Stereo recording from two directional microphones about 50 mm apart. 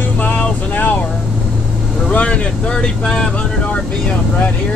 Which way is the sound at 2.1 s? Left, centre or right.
Left.